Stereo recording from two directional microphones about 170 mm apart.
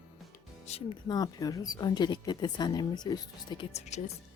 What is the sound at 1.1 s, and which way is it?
Speech, 20° left (ahead or behind).